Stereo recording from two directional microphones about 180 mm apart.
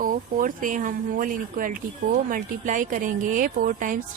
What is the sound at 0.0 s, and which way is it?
Speech, 50° right (ahead or behind).